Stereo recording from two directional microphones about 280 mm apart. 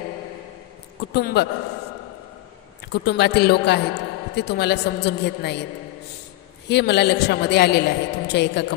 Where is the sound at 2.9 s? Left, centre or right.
Left.